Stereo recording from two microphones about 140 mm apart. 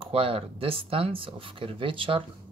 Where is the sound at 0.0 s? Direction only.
40° right (ahead or behind).